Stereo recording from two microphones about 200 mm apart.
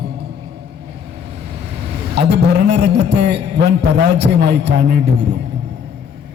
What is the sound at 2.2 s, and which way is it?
A man's voice, 55° right (ahead or behind).